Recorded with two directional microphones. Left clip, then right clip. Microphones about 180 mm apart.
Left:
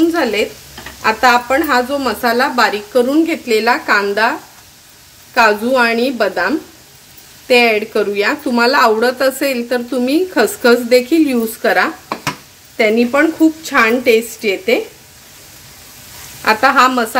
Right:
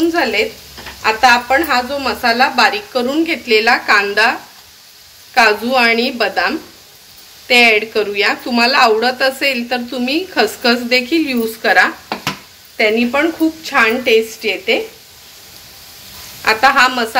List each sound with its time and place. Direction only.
0.1 s a woman's voice: 60° left (ahead or behind)
16.4 s speech: 60° left (ahead or behind)